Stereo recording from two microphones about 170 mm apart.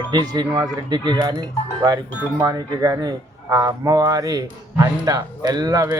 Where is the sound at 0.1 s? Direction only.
25° right (ahead or behind).